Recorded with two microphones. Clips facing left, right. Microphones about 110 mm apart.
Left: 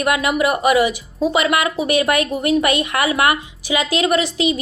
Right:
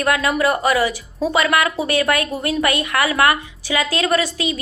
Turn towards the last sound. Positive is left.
turn(degrees=20)  # may be behind; listen again after turning